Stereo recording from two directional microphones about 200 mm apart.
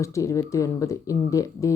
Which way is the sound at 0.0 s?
15° left (ahead or behind).